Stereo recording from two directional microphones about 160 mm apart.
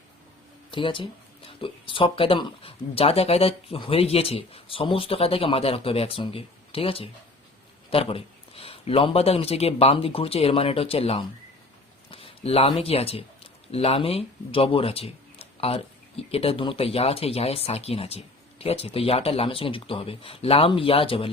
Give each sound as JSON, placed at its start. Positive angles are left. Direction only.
{"t": 0.7, "sound": "speech", "side_deg": 30}